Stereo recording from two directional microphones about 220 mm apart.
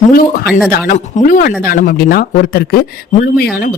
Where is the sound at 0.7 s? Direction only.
35° left (ahead or behind).